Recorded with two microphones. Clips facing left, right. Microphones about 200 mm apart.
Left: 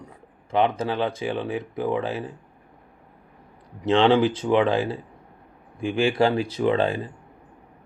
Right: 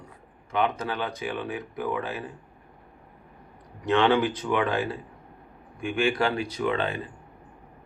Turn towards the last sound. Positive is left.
turn(degrees=35)  # may be behind; listen again after turning